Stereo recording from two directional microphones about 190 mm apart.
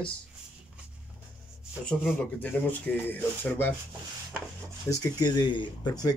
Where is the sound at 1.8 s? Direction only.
5° left (ahead or behind).